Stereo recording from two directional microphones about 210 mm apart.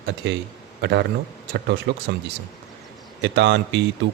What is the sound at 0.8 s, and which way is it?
A man's voice, 55° right (ahead or behind).